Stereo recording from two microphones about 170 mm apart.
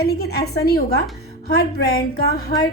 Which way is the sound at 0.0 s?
70° left (ahead or behind).